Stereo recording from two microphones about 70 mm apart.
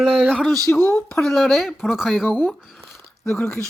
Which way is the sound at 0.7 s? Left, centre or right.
Left.